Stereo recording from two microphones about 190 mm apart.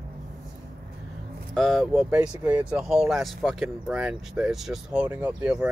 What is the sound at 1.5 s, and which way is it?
Speech, centre (ahead or behind).